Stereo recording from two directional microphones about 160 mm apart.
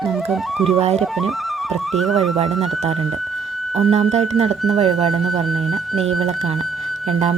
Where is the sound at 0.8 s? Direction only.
40° right (ahead or behind).